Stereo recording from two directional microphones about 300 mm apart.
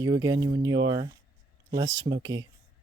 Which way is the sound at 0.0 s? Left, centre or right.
Centre.